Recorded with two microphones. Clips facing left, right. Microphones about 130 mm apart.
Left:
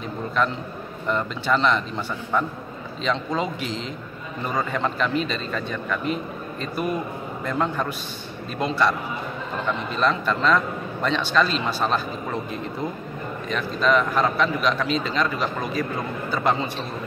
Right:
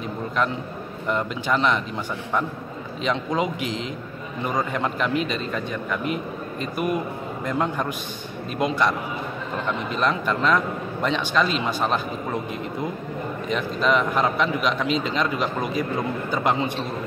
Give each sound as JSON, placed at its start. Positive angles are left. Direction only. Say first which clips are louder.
{"t": 1.0, "sound": "a man's voice", "louder": "even", "side_deg": -10}
{"t": 3.0, "sound": "a man's voice", "louder": "right 1 dB", "side_deg": -15}
{"t": 9.9, "sound": "a man's voice", "louder": "left 1 dB", "side_deg": -10}
{"t": 13.5, "sound": "a man's voice", "louder": "left 1 dB", "side_deg": -20}